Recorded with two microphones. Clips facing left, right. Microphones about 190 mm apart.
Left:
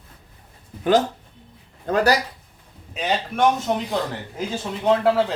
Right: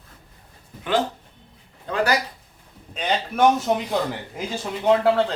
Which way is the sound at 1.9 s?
45° left (ahead or behind).